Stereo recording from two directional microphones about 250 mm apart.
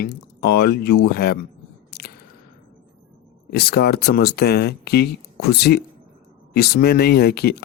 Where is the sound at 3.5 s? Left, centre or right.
Left.